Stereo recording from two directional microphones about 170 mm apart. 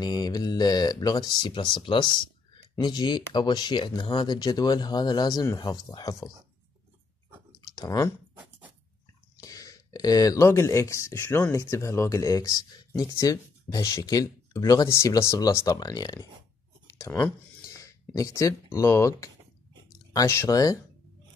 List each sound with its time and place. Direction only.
0.0 s speech: 25° left (ahead or behind)
7.7 s speech: 25° left (ahead or behind)
9.4 s speech: 20° left (ahead or behind)